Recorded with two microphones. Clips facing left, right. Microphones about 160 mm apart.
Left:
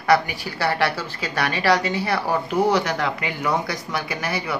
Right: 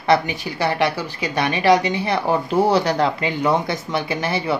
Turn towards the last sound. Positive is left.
turn(degrees=-25)  # may be behind; listen again after turning